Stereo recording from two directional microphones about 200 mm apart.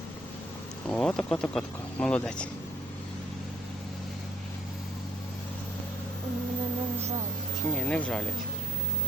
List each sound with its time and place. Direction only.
0.9 s speech: 5° left (ahead or behind)
7.7 s speech: 5° left (ahead or behind)